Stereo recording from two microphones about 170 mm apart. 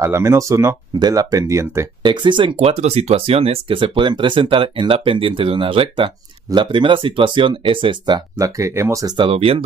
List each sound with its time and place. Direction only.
0.0 s speech: 15° right (ahead or behind); by 9.6 s 35° right (ahead or behind)